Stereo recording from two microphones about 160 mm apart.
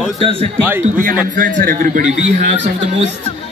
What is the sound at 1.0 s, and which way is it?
A man's voice, 60° right (ahead or behind).